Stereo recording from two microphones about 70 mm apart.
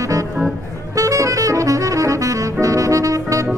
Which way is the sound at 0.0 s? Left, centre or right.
Right.